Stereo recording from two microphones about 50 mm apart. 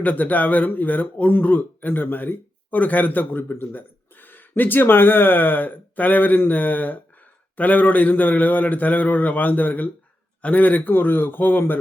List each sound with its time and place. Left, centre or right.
0.0 s speech: left